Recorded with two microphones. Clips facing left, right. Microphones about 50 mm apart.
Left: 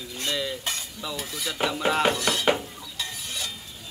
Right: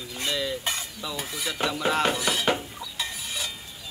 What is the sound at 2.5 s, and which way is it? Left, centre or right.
Dishes, centre.